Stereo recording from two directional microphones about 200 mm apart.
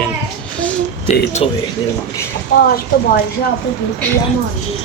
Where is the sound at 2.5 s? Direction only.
45° left (ahead or behind).